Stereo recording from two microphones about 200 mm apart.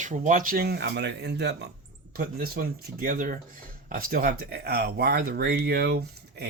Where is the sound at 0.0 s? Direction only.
40° right (ahead or behind).